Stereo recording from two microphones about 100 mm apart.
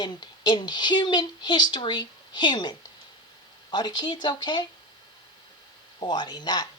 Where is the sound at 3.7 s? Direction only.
45° left (ahead or behind).